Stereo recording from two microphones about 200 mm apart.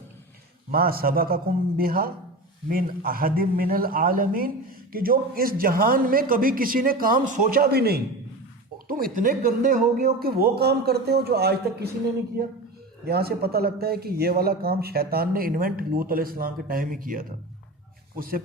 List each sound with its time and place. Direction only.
0.7 s a man's voice: 50° right (ahead or behind)